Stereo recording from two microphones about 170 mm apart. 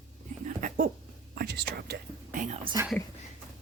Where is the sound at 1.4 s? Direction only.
70° right (ahead or behind).